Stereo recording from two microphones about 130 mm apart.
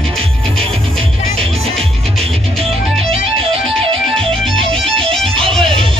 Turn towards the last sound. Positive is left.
turn(degrees=-45)  # may be behind; listen again after turning